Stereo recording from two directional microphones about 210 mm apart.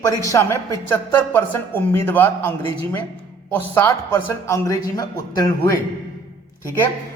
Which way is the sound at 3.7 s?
10° left (ahead or behind).